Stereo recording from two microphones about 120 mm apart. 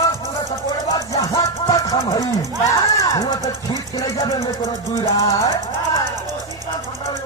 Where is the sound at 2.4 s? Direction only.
30° left (ahead or behind).